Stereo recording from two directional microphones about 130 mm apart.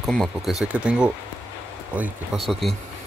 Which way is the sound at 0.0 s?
Centre (ahead or behind).